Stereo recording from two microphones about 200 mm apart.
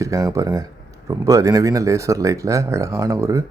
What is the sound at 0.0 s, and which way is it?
Speech, 15° right (ahead or behind).